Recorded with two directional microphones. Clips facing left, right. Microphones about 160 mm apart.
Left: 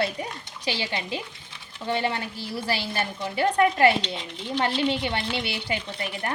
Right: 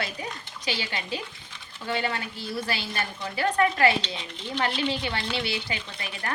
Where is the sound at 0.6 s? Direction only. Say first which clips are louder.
Left 3 dB; 30° left (ahead or behind).